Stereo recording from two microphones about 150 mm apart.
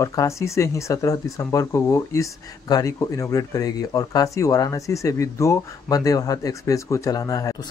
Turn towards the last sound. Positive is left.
turn(degrees=20)  # may be behind; listen again after turning